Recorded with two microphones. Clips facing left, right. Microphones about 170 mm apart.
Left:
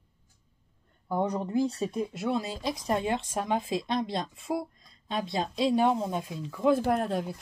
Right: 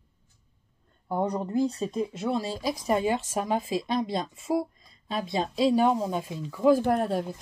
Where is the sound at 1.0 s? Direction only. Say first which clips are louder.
Right 1 dB; 25° right (ahead or behind).